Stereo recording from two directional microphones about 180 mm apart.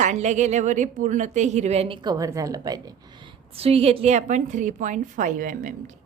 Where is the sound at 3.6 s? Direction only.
35° right (ahead or behind).